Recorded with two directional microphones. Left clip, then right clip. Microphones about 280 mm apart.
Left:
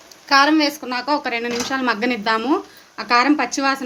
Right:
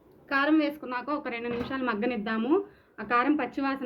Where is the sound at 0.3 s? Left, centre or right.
Left.